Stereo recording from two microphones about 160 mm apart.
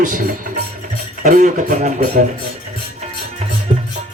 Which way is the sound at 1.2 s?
50° right (ahead or behind).